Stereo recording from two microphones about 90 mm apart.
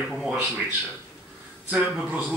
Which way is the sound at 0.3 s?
15° right (ahead or behind).